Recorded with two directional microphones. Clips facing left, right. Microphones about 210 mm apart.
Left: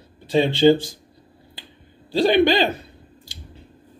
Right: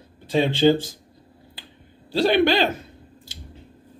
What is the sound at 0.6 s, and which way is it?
Speech, 5° left (ahead or behind).